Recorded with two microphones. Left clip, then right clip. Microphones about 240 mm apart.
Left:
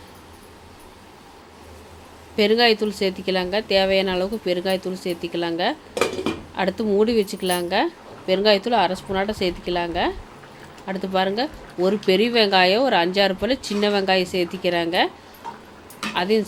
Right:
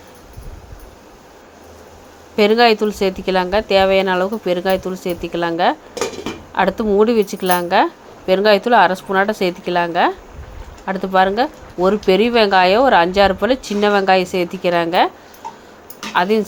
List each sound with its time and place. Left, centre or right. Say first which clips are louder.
2.3 s a woman's voice: right 5 dB; centre
16.1 s a woman's voice: right 6 dB; centre